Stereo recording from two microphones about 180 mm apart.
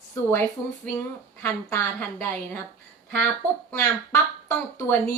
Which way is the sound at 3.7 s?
15° left (ahead or behind).